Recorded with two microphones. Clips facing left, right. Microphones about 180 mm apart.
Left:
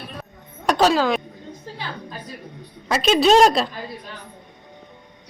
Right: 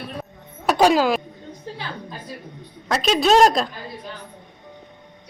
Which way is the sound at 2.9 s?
Centre (ahead or behind).